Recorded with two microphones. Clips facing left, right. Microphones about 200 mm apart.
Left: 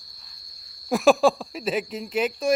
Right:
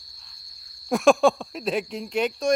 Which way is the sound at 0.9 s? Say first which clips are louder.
Even; centre (ahead or behind).